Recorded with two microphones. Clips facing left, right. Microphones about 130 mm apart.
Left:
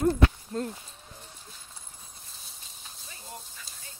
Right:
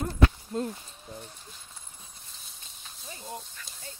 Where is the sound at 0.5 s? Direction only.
10° right (ahead or behind).